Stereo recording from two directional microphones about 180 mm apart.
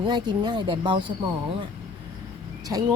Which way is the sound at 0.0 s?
25° right (ahead or behind).